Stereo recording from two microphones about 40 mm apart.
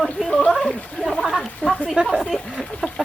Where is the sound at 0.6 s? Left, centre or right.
Left.